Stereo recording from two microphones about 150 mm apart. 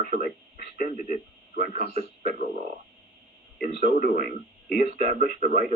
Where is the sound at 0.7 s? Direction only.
75° left (ahead or behind).